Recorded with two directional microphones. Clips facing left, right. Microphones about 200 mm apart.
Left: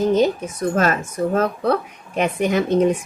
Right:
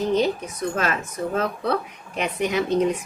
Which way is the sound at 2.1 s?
50° left (ahead or behind).